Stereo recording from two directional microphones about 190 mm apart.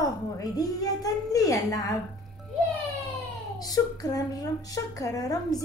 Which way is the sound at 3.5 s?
20° left (ahead or behind).